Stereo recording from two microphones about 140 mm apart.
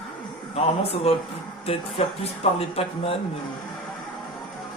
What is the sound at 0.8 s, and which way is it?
Speech, 45° left (ahead or behind).